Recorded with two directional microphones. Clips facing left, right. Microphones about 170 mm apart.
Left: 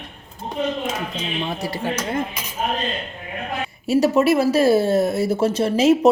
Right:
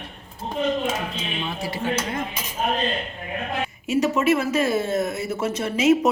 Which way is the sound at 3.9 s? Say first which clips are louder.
Left 4 dB; 35° left (ahead or behind).